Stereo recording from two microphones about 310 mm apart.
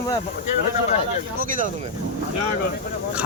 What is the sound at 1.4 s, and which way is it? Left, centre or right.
Speech, right.